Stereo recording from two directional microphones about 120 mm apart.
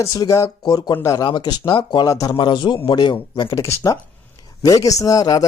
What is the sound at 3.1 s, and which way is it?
Speech, 30° left (ahead or behind).